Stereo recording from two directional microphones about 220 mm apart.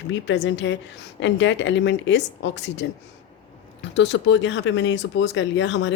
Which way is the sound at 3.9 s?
55° left (ahead or behind).